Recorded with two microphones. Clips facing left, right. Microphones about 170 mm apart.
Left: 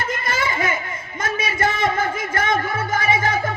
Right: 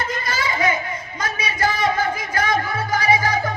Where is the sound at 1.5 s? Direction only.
25° left (ahead or behind).